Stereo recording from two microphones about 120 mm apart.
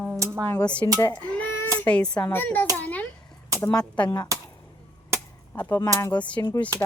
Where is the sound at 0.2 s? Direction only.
20° right (ahead or behind).